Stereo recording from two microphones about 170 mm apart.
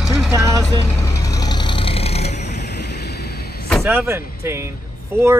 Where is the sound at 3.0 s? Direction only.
70° left (ahead or behind).